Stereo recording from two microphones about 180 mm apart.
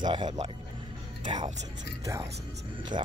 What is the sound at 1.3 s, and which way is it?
Speech, 40° right (ahead or behind).